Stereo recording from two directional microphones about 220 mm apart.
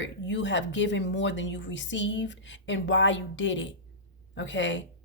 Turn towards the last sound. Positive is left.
turn(degrees=55)  # may be behind; listen again after turning